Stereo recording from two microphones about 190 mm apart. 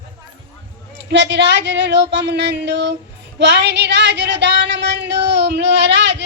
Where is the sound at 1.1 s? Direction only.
65° right (ahead or behind).